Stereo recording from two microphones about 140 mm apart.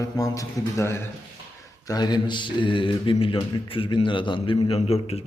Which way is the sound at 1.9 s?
30° left (ahead or behind).